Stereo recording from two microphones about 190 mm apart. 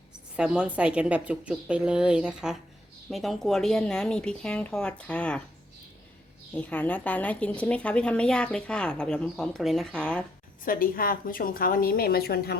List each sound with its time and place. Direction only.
0.3 s a woman's voice: 5° right (ahead or behind)
6.5 s a woman's voice: 10° left (ahead or behind)
10.7 s a woman's voice: 50° left (ahead or behind)